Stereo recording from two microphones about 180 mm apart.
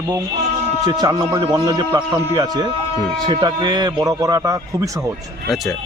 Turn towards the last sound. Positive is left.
turn(degrees=-20)  # may be behind; listen again after turning